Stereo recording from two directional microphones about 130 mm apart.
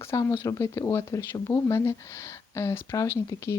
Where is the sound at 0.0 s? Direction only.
20° left (ahead or behind).